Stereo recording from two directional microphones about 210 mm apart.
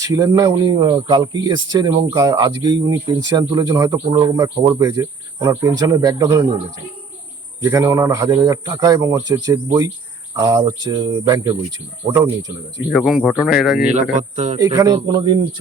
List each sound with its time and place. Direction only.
0.0 s speech: 15° right (ahead or behind)
7.6 s speech: 15° right (ahead or behind)
12.9 s speech: centre (ahead or behind)
13.9 s speech: 35° right (ahead or behind)
14.6 s speech: 15° right (ahead or behind)